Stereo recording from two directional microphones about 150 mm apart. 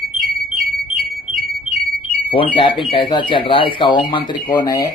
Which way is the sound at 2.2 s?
35° left (ahead or behind).